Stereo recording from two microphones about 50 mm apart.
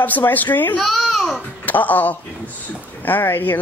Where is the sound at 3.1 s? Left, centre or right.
Left.